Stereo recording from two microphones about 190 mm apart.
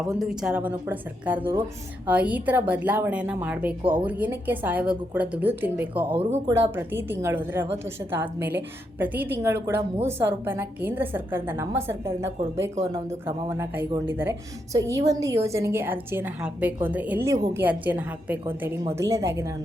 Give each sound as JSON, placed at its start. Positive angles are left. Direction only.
{"t": 0.0, "sound": "a woman's voice", "side_deg": 0}